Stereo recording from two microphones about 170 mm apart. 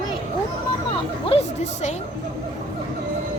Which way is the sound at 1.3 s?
40° left (ahead or behind).